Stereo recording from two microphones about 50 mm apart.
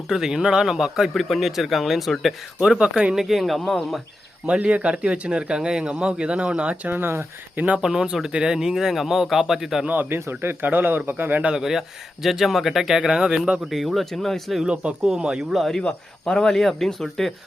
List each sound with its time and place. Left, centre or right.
0.1 s speech: centre
2.6 s speech: centre
3.2 s speech: centre
4.4 s speech: right
6.8 s speech: right
7.8 s speech: centre
9.8 s speech: right
10.1 s speech: right
11.5 s speech: centre
13.7 s speech: centre
14.6 s speech: centre
15.6 s speech: centre